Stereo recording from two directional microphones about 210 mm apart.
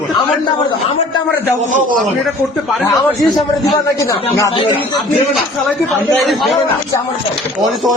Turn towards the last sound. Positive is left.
turn(degrees=0)  # may be behind; listen again after turning